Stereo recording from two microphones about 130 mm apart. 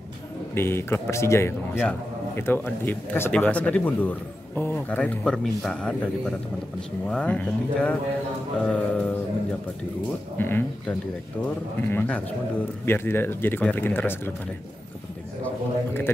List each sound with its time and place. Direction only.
0.6 s speech: 20° left (ahead or behind)
10.3 s speech: 15° left (ahead or behind)
15.4 s speech: 15° left (ahead or behind)